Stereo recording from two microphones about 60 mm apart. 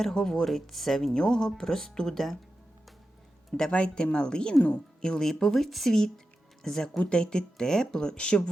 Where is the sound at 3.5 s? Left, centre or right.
Centre.